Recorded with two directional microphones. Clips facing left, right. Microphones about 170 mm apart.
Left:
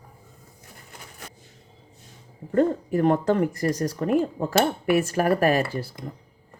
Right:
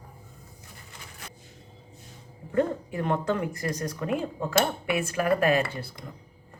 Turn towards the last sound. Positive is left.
turn(degrees=40)  # may be behind; listen again after turning